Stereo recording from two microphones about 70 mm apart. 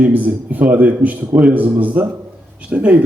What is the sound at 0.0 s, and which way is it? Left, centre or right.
A man's voice, right.